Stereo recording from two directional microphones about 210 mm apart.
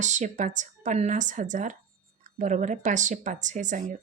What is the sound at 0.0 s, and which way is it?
Speech, 35° right (ahead or behind).